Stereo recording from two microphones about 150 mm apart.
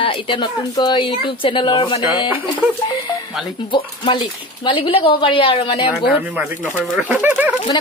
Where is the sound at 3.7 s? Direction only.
35° left (ahead or behind).